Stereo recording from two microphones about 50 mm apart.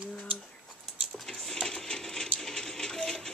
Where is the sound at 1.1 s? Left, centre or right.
Centre.